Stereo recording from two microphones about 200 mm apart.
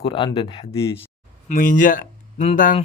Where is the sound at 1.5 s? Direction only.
40° left (ahead or behind).